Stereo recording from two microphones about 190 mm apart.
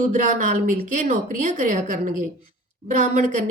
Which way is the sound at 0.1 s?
40° right (ahead or behind).